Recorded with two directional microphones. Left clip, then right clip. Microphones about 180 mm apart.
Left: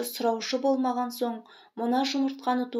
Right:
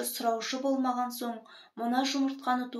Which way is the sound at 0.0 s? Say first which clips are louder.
Left 3 dB; 30° left (ahead or behind).